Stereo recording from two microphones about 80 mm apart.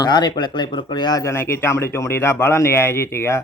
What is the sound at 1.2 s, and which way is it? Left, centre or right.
Speech, left.